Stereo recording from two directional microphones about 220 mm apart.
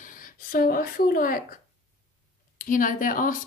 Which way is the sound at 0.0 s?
40° left (ahead or behind).